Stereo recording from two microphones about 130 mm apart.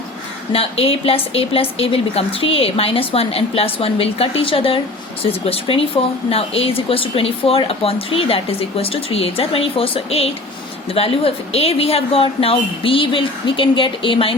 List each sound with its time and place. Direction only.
0.5 s a woman's voice: 50° left (ahead or behind)